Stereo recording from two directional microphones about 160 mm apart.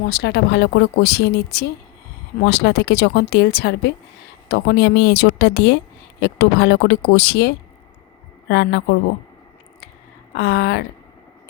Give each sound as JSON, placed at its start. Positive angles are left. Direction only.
{"t": 0.0, "sound": "speech", "side_deg": 90}
{"t": 10.3, "sound": "speech", "side_deg": 90}